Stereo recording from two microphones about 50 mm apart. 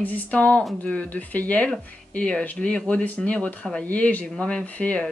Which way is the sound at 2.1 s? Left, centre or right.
Left.